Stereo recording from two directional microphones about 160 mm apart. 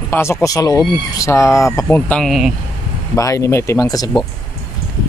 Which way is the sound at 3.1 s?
20° left (ahead or behind).